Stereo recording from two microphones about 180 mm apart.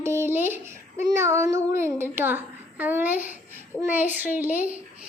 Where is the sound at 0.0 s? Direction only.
15° right (ahead or behind).